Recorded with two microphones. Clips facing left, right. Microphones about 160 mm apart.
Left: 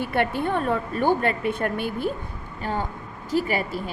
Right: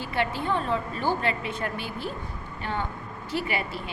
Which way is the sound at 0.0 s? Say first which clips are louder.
Left 5 dB; 55° left (ahead or behind).